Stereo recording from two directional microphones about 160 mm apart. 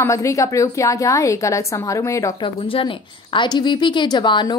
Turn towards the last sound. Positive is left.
turn(degrees=30)  # may be behind; listen again after turning